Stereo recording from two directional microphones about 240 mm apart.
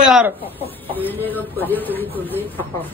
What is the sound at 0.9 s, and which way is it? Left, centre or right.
Speech, centre.